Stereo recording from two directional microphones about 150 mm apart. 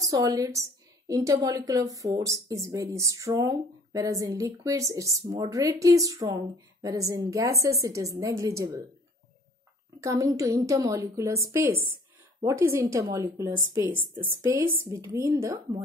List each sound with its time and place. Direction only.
0.0 s a woman's voice: 25° right (ahead or behind)
9.9 s a woman's voice: 20° right (ahead or behind)